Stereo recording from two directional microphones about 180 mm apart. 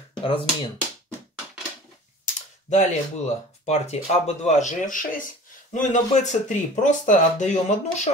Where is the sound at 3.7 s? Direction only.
40° left (ahead or behind).